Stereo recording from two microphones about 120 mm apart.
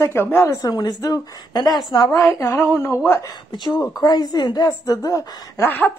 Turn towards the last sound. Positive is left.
turn(degrees=15)  # may be behind; listen again after turning